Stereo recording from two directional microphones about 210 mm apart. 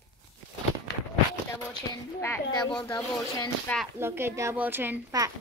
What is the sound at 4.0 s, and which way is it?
Speech, 10° right (ahead or behind).